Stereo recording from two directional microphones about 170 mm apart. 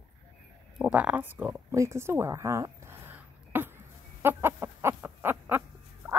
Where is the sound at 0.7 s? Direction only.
5° right (ahead or behind).